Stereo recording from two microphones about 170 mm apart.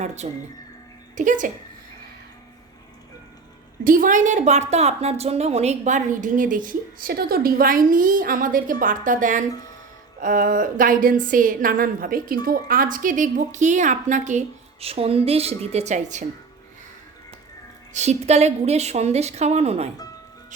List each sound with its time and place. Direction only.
0.0 s a woman's voice: 40° right (ahead or behind)
3.8 s a sound: 55° right (ahead or behind)
17.9 s a woman's voice: 40° right (ahead or behind)